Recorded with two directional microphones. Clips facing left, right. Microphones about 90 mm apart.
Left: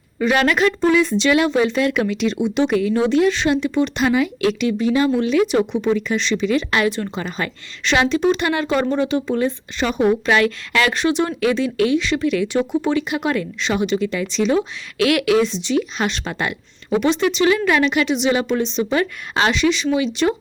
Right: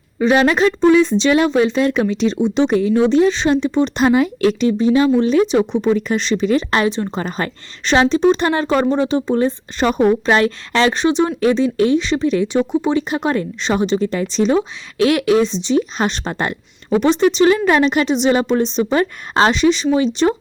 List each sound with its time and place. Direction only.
0.2 s speech: 25° right (ahead or behind)
7.1 s speech: 40° right (ahead or behind)